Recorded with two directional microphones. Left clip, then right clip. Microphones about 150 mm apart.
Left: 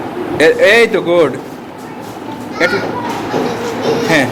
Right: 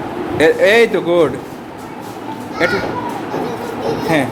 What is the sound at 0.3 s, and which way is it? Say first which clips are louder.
Speech: left 2 dB; 15° right (ahead or behind).